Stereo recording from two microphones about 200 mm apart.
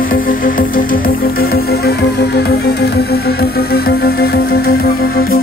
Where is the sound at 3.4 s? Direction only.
50° left (ahead or behind).